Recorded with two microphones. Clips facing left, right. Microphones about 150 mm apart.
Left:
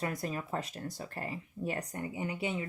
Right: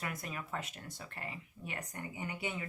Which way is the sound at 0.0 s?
35° left (ahead or behind).